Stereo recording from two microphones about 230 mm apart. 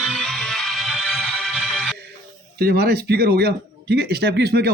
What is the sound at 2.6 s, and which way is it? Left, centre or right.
Speech, right.